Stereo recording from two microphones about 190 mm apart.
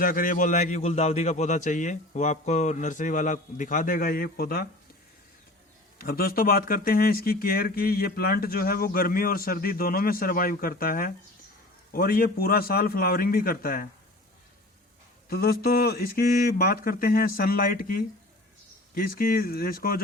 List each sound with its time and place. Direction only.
0.0 s a man's voice: 50° left (ahead or behind)
6.0 s speech: 50° left (ahead or behind)
15.3 s speech: 55° left (ahead or behind)